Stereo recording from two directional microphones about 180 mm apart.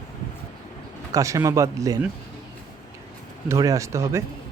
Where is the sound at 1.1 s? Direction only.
20° right (ahead or behind).